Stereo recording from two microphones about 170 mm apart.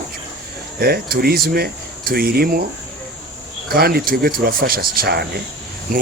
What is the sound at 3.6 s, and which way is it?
Speech, 65° right (ahead or behind).